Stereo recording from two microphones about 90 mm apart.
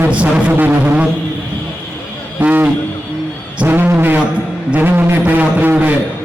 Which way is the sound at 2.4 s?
20° right (ahead or behind).